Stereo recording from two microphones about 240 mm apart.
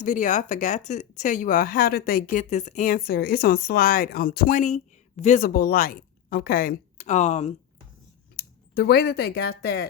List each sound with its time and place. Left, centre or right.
0.0 s speech: left
8.4 s speech: left